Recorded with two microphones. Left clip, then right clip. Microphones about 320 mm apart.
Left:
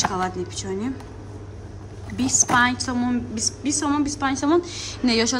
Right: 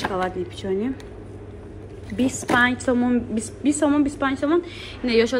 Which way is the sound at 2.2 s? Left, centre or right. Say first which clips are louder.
Left 1 dB; centre.